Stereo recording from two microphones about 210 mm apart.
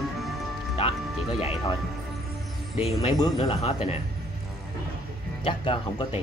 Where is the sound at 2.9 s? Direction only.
20° left (ahead or behind).